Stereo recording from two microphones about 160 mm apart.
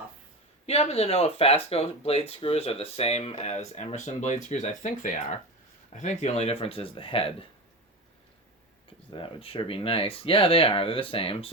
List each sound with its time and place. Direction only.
0.7 s speech: 40° left (ahead or behind)
5.9 s speech: 50° left (ahead or behind)
9.0 s speech: 35° left (ahead or behind)